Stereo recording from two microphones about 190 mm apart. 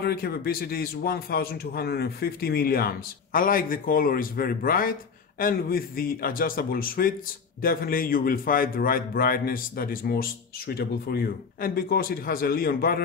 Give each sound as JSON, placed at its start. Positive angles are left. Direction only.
{"t": 0.0, "sound": "a man's voice", "side_deg": 55}